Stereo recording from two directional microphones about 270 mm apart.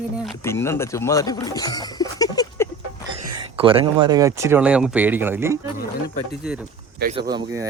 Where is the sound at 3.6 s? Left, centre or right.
Centre.